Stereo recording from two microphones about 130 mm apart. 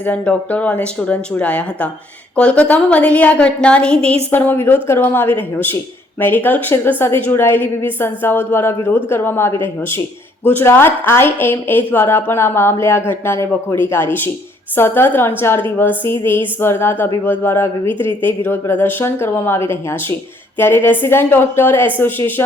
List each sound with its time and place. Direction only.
0.0 s a woman's voice: 10° left (ahead or behind)